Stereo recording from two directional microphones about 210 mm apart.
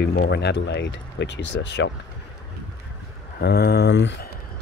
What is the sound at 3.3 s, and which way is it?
Speech, 50° left (ahead or behind).